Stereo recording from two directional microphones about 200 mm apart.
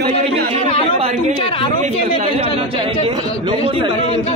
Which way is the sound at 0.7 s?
30° left (ahead or behind).